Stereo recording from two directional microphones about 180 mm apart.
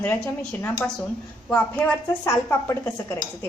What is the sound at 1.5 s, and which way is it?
Speech, 10° left (ahead or behind).